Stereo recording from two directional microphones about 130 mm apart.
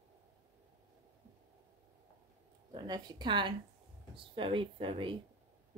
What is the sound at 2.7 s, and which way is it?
Speech, 35° right (ahead or behind).